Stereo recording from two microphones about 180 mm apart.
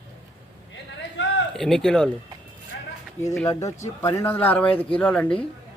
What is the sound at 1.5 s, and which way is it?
Speech, centre (ahead or behind).